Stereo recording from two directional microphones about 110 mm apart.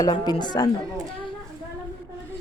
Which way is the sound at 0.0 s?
40° left (ahead or behind).